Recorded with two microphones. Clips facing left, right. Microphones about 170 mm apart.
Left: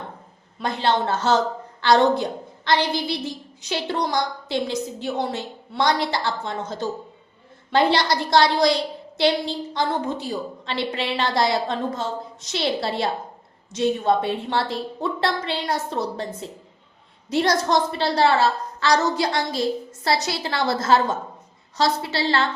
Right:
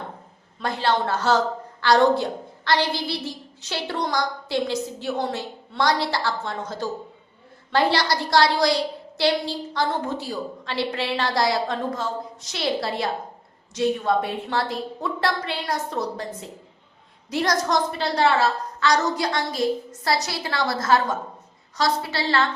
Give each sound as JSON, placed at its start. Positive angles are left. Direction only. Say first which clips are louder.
{"t": 0.6, "sound": "a woman's voice", "louder": "left 1 dB", "side_deg": 20}
{"t": 17.2, "sound": "a woman's voice", "louder": "left 3 dB", "side_deg": 25}